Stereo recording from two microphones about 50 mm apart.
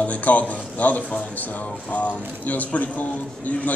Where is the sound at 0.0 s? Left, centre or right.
Left.